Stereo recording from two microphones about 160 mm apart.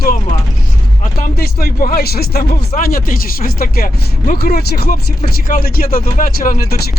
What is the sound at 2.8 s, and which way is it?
Speech, 65° left (ahead or behind).